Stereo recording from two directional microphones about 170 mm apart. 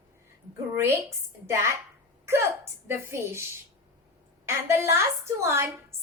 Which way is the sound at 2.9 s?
15° right (ahead or behind).